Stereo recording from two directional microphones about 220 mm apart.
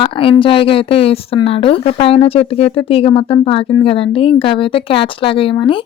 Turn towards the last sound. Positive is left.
turn(degrees=25)  # may be behind; listen again after turning